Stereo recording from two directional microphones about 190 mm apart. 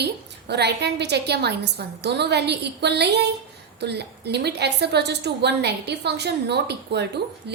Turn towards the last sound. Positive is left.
turn(degrees=-60)  # may be behind; listen again after turning